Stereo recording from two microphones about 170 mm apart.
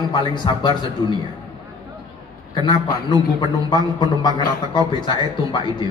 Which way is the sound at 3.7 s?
25° left (ahead or behind).